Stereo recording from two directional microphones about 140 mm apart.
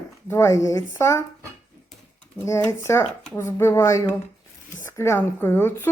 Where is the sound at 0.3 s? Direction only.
20° left (ahead or behind).